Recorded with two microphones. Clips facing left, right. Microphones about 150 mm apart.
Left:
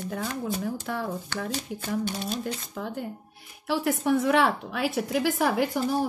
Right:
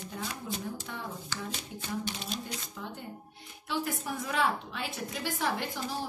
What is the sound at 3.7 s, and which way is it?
A woman's voice, 70° left (ahead or behind).